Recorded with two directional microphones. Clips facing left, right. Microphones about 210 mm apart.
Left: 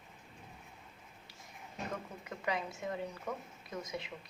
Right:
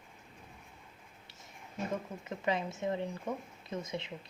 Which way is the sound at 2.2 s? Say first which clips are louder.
Right 3 dB; 25° right (ahead or behind).